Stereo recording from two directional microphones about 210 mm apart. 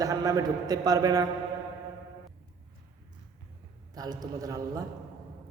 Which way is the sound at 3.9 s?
20° right (ahead or behind).